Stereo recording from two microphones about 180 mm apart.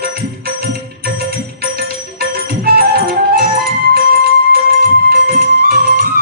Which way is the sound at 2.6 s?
55° right (ahead or behind).